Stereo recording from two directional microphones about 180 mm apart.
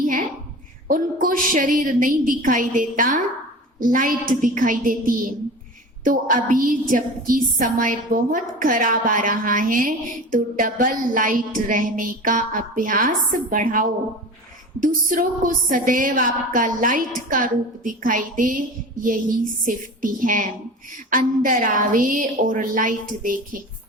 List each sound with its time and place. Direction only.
0.0 s a sound: 45° right (ahead or behind)
0.9 s a woman's voice: 50° right (ahead or behind)
19.6 s a woman's voice: 50° right (ahead or behind)